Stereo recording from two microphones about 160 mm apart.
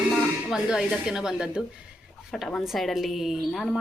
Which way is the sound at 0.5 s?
5° right (ahead or behind).